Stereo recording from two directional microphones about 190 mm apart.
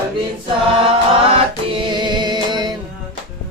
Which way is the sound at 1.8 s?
25° right (ahead or behind).